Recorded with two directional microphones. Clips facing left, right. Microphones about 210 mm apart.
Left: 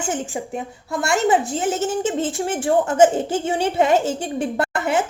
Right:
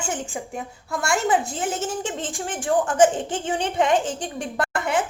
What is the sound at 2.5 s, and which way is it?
Speech, 25° left (ahead or behind).